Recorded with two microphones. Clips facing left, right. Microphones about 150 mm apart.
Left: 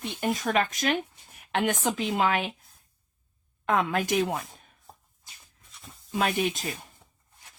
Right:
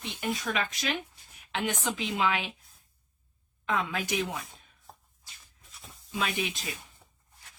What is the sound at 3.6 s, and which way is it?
Speech, 55° left (ahead or behind).